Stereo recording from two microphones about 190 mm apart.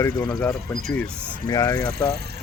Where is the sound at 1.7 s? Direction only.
50° right (ahead or behind).